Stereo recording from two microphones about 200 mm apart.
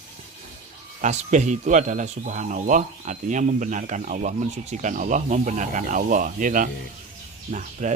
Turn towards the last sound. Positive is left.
turn(degrees=-35)  # may be behind; listen again after turning